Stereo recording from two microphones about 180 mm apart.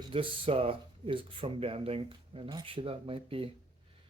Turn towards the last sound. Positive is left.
turn(degrees=-30)  # may be behind; listen again after turning